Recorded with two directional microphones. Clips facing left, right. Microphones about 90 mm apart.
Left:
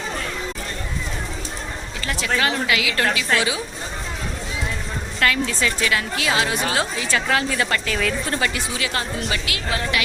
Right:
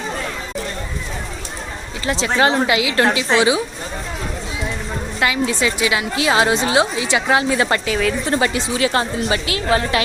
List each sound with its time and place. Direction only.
2.0 s a woman's voice: 25° right (ahead or behind)
5.2 s a woman's voice: 20° right (ahead or behind)
7.9 s a woman's voice: 10° right (ahead or behind)
8.3 s a woman's voice: 25° right (ahead or behind)